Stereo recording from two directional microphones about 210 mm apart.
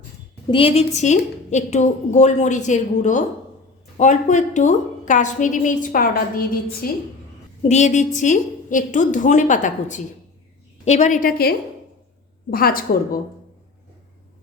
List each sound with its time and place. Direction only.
0.5 s a woman's voice: 30° left (ahead or behind); by 6.9 s 45° left (ahead or behind)
7.6 s a woman's voice: 35° left (ahead or behind)